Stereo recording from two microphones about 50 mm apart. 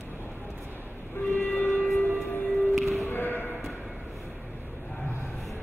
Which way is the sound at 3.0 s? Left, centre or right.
Left.